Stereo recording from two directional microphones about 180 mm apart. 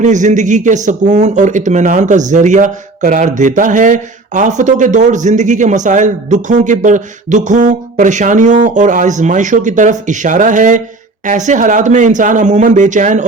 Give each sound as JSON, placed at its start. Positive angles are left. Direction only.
{"t": 0.0, "sound": "speech", "side_deg": -40}